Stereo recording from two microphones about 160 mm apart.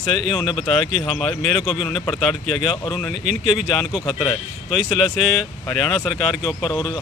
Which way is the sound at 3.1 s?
45° right (ahead or behind).